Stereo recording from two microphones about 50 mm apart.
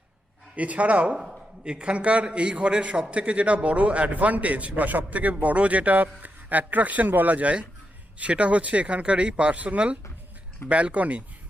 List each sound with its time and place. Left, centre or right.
0.5 s a man's voice: right